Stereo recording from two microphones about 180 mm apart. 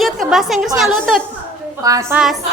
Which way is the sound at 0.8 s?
Centre (ahead or behind).